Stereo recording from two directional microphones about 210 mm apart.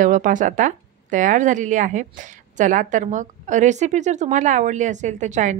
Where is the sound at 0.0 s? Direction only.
40° right (ahead or behind).